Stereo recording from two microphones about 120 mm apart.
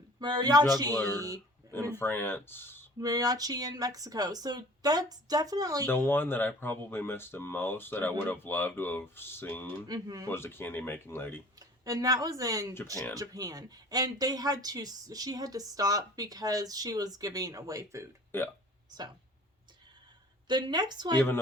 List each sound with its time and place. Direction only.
0.2 s speech: 35° right (ahead or behind)
1.9 s speech: 20° left (ahead or behind)
3.0 s speech: 30° right (ahead or behind)
6.1 s speech: 20° left (ahead or behind)
9.8 s speech: 30° right (ahead or behind)
10.2 s speech: 20° left (ahead or behind)
11.6 s speech: 30° right (ahead or behind)
12.7 s speech: 20° left (ahead or behind)
13.1 s speech: 30° right (ahead or behind)
18.3 s speech: 20° left (ahead or behind)
20.5 s speech: 40° right (ahead or behind)